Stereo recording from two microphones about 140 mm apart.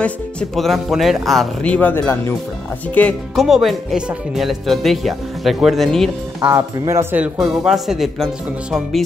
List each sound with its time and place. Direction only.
0.0 s speech: 5° left (ahead or behind)
3.3 s speech: centre (ahead or behind)
6.5 s speech: 20° right (ahead or behind)
7.3 s speech: 5° right (ahead or behind)